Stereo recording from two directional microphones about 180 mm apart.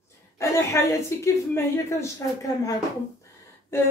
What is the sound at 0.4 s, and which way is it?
A child's voice, 15° left (ahead or behind).